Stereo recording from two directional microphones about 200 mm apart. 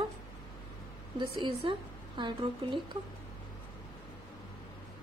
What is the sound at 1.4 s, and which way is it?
A woman's voice, 25° right (ahead or behind).